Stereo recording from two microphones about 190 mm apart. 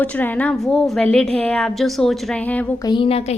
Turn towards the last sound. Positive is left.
turn(degrees=30)  # may be behind; listen again after turning